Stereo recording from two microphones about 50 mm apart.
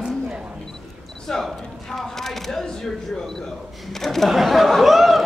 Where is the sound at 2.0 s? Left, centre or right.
Centre.